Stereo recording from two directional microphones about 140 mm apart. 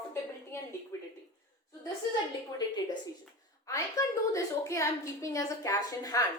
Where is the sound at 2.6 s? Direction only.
30° left (ahead or behind).